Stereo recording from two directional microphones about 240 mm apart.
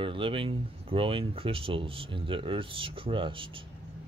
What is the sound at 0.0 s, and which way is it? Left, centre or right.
Speech, right.